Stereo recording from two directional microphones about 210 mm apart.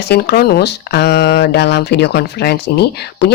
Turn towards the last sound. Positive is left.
turn(degrees=50)  # may be behind; listen again after turning